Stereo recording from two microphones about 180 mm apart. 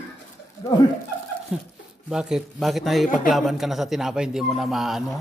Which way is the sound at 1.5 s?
5° right (ahead or behind).